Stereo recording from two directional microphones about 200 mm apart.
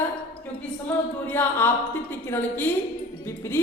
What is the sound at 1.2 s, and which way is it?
A woman's voice, 10° left (ahead or behind).